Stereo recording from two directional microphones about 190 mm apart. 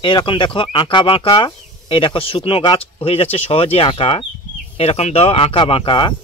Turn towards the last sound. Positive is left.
turn(degrees=25)  # may be behind; listen again after turning